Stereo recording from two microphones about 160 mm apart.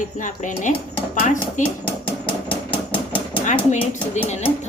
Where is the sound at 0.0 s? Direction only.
50° left (ahead or behind).